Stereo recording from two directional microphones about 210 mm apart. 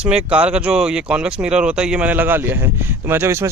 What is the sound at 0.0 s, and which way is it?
Speech, 5° right (ahead or behind).